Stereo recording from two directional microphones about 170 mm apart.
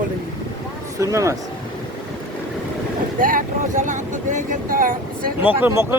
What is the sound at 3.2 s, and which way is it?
Speech, 50° right (ahead or behind).